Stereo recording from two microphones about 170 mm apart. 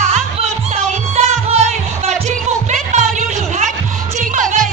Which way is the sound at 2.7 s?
45° right (ahead or behind).